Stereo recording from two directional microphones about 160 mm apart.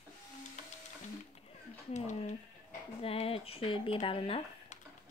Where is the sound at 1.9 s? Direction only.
45° left (ahead or behind).